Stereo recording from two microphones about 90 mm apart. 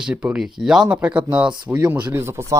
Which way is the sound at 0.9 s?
15° right (ahead or behind).